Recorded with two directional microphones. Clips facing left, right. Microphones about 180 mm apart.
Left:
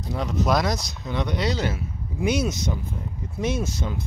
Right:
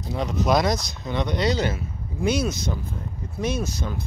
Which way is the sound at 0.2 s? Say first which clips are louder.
Right 2 dB; centre (ahead or behind).